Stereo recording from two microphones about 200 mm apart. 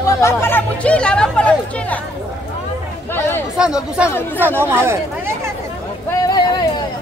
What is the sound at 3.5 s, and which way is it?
Speech, 5° right (ahead or behind).